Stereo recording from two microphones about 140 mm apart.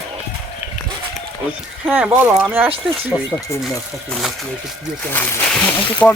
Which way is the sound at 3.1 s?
25° left (ahead or behind).